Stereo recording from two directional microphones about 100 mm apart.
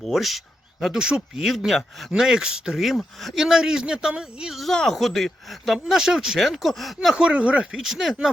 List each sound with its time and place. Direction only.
0.0 s speech: centre (ahead or behind)